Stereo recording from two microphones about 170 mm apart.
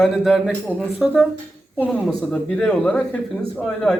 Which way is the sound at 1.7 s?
10° left (ahead or behind).